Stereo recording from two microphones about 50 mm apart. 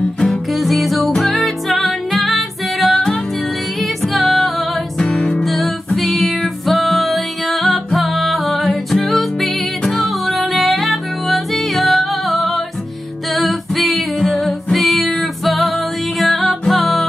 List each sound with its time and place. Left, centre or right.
0.2 s music: centre